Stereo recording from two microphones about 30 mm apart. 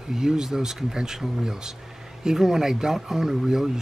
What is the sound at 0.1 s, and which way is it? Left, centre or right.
Speech, centre.